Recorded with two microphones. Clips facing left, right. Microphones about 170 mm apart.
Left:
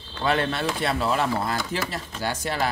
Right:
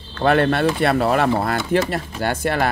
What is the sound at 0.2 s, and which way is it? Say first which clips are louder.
Speech: right 8 dB; 55° right (ahead or behind).